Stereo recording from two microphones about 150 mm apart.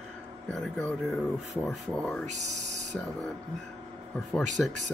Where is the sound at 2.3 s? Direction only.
50° right (ahead or behind).